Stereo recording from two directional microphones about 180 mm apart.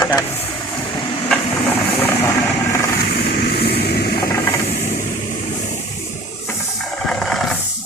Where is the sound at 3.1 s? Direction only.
60° left (ahead or behind).